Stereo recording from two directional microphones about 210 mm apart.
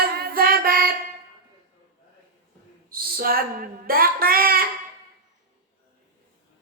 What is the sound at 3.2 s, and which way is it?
Speech, 45° right (ahead or behind).